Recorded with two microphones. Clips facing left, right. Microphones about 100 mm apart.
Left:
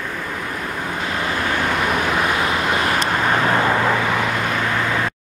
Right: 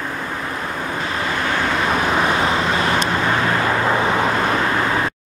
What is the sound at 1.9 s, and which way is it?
Vehicle, 30° right (ahead or behind).